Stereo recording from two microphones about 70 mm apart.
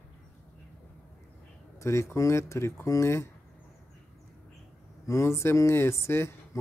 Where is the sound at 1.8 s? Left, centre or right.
Left.